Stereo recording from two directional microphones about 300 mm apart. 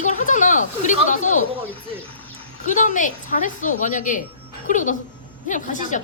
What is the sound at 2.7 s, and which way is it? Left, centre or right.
A woman's voice, left.